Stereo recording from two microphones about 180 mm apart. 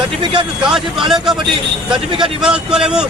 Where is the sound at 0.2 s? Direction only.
25° right (ahead or behind).